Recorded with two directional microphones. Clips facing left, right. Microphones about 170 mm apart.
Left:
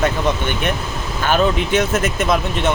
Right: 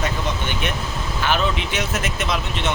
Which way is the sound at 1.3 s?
50° left (ahead or behind).